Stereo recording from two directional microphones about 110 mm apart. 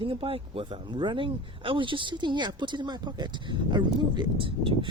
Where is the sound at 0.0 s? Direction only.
55° right (ahead or behind).